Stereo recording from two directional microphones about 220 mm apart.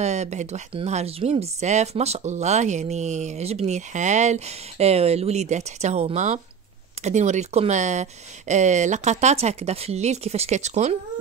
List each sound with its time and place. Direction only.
0.0 s speech: 30° right (ahead or behind)